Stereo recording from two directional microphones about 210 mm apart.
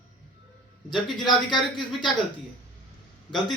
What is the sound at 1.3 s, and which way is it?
Speech, 20° left (ahead or behind).